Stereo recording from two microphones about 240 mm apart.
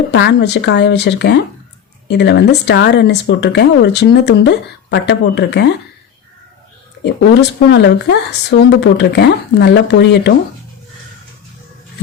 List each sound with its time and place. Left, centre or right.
0.1 s speech: left
7.7 s speech: left